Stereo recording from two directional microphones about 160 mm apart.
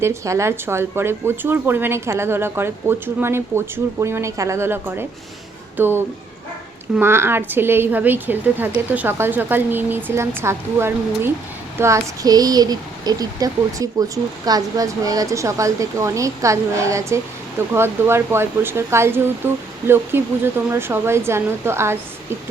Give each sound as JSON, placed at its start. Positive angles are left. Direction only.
{"t": 0.0, "sound": "a woman's voice", "side_deg": -15}